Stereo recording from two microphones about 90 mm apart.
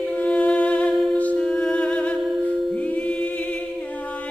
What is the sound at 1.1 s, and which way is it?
Humming, 15° left (ahead or behind).